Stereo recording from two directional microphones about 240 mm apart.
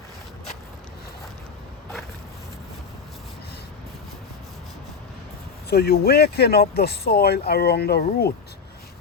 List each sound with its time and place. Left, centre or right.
5.7 s speech: left